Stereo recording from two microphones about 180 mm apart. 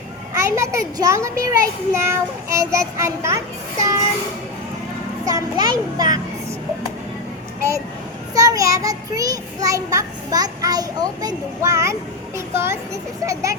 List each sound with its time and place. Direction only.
0.3 s child singing: 15° right (ahead or behind)
5.2 s a child's voice: 20° right (ahead or behind)
8.4 s a child's voice: 20° right (ahead or behind)
12.5 s child singing: 15° right (ahead or behind)